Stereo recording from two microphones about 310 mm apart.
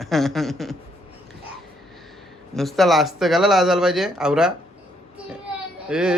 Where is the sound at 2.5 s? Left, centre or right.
Centre.